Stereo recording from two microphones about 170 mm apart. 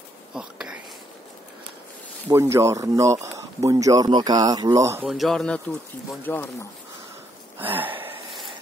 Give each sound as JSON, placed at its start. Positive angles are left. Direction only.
{"t": 0.3, "sound": "whispering", "side_deg": -5}
{"t": 2.2, "sound": "speech", "side_deg": -15}
{"t": 5.0, "sound": "speech", "side_deg": 0}
{"t": 7.7, "sound": "speech", "side_deg": -10}